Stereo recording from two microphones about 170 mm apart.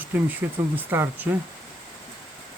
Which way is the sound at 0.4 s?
10° right (ahead or behind).